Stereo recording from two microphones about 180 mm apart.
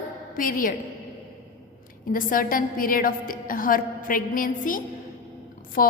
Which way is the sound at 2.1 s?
50° left (ahead or behind).